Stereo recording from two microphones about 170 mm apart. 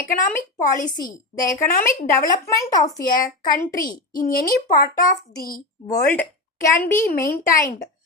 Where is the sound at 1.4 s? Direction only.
15° left (ahead or behind).